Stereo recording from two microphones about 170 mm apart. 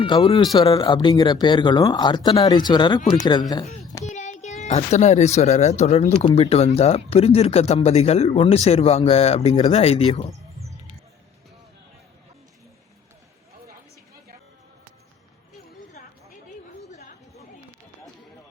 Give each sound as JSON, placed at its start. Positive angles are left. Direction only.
{"t": 0.0, "sound": "speech", "side_deg": 30}
{"t": 4.0, "sound": "a child's voice", "side_deg": 45}